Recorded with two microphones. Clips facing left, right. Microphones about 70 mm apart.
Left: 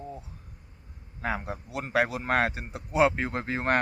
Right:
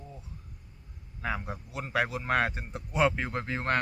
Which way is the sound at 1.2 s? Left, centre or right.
Left.